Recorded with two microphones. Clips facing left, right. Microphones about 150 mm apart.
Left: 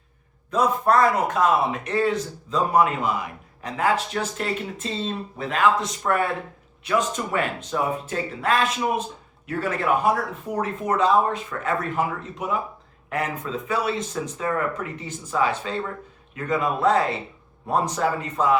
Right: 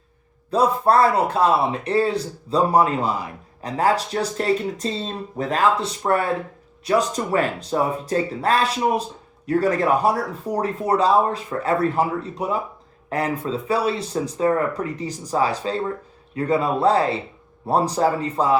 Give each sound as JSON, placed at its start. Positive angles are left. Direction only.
{"t": 0.5, "sound": "speech", "side_deg": -30}